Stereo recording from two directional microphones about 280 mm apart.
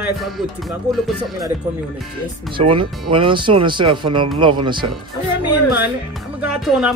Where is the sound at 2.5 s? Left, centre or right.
Centre.